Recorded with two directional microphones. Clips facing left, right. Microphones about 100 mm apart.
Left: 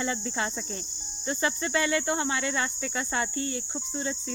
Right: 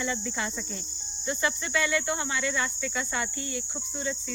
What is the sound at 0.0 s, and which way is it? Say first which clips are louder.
Cricket: left 1 dB; 35° left (ahead or behind).